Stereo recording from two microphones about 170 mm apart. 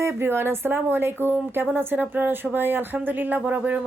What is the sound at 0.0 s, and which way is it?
Speech, 15° right (ahead or behind).